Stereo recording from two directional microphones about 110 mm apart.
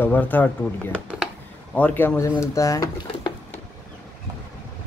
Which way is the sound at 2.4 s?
30° left (ahead or behind).